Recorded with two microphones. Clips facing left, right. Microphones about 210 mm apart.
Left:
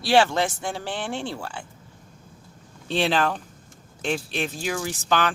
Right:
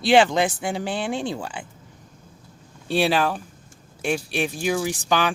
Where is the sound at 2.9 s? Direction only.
10° right (ahead or behind).